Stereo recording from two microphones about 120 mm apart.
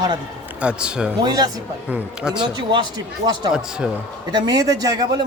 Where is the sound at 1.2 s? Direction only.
35° right (ahead or behind).